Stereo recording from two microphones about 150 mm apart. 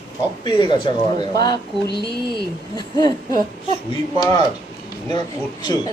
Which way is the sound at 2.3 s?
30° left (ahead or behind).